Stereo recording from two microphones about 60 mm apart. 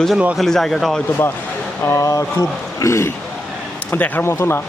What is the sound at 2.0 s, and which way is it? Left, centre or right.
Speech, left.